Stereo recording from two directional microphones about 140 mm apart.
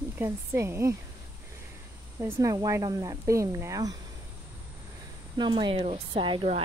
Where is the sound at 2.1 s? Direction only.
20° right (ahead or behind).